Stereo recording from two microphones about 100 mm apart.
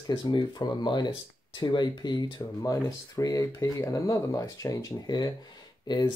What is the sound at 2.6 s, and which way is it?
Speech, 35° left (ahead or behind).